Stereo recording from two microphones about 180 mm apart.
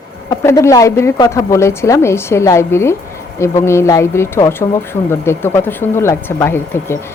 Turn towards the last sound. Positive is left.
turn(degrees=15)  # may be behind; listen again after turning